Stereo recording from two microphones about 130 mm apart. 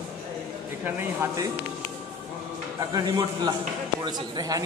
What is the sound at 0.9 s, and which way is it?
Speech, 15° right (ahead or behind).